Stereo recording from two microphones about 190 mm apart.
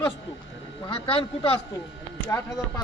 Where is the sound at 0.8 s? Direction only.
30° left (ahead or behind).